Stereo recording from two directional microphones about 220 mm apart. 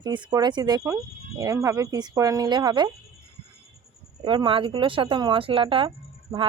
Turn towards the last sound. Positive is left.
turn(degrees=-25)  # may be behind; listen again after turning